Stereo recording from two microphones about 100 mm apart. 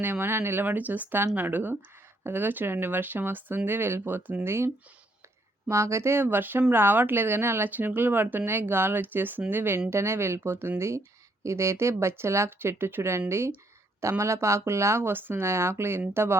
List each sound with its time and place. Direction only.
0.0 s speech: 20° right (ahead or behind)